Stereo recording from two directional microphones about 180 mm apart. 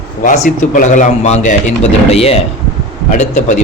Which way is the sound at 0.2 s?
45° left (ahead or behind).